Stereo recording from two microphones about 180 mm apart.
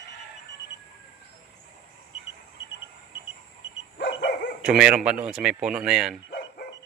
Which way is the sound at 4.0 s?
80° left.